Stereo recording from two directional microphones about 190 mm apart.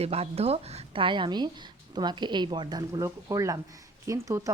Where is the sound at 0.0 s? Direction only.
30° right (ahead or behind).